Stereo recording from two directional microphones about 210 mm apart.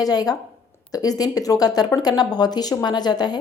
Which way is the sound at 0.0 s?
20° left (ahead or behind).